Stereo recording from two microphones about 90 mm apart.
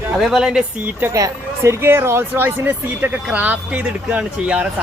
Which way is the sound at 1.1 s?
35° right (ahead or behind).